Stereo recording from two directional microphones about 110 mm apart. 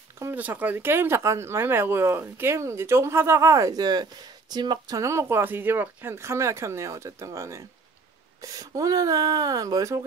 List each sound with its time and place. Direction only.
0.2 s speech: 20° right (ahead or behind)